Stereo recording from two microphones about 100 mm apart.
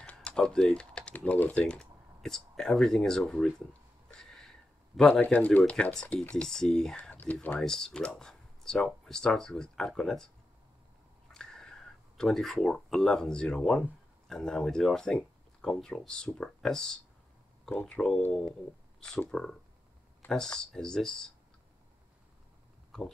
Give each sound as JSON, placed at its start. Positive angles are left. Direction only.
{"t": 0.0, "sound": "speech", "side_deg": 10}
{"t": 4.2, "sound": "a sound", "side_deg": 5}
{"t": 5.2, "sound": "speech", "side_deg": 15}
{"t": 7.0, "sound": "whispering", "side_deg": 15}
{"t": 7.5, "sound": "speech", "side_deg": 5}
{"t": 11.3, "sound": "speech", "side_deg": 5}
{"t": 22.8, "sound": "a sound", "side_deg": 5}